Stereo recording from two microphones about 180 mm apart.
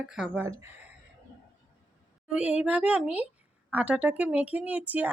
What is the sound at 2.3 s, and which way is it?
Speech, 5° right (ahead or behind).